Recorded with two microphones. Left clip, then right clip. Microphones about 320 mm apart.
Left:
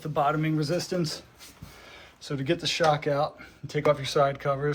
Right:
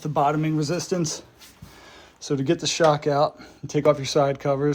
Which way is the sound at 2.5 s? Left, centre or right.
Right.